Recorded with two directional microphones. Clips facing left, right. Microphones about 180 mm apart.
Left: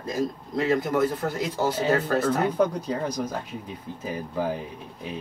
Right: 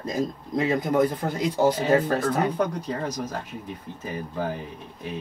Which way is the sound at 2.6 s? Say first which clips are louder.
Left 2 dB; 10° left (ahead or behind).